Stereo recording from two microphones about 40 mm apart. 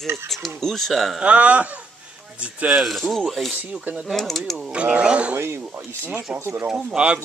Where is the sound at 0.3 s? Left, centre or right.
Centre.